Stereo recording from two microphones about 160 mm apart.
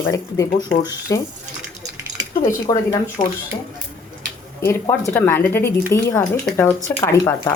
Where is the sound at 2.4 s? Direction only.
20° left (ahead or behind).